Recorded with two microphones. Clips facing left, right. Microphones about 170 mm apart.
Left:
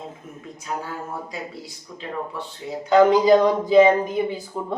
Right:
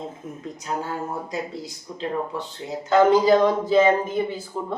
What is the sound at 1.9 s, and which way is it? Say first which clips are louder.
Speech: right 5 dB; 20° right (ahead or behind).